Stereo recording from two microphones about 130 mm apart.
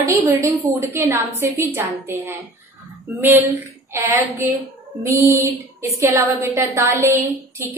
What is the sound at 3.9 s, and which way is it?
A woman's voice, 25° right (ahead or behind).